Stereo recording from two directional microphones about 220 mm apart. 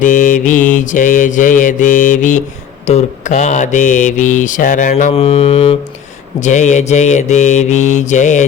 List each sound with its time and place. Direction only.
0.0 s mantra: 35° left (ahead or behind)